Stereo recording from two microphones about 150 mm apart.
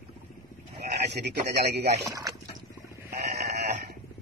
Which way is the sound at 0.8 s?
90° right.